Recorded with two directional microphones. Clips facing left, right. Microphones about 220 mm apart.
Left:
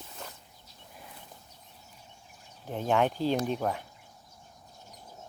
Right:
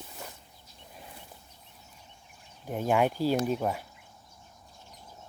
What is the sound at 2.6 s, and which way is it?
Speech, 10° right (ahead or behind).